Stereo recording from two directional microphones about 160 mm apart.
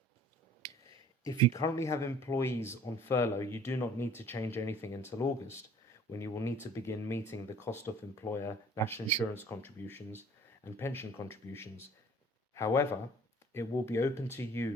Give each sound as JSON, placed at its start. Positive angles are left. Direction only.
{"t": 1.2, "sound": "speech", "side_deg": 20}